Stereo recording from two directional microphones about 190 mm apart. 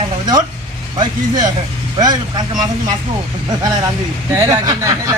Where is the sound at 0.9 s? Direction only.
20° right (ahead or behind).